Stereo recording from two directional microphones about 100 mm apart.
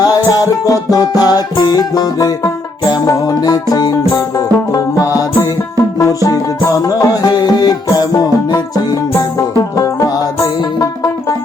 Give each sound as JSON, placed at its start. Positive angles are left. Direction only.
{"t": 0.0, "sound": "music", "side_deg": 40}